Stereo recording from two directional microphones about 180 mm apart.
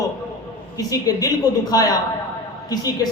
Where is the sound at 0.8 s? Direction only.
20° left (ahead or behind).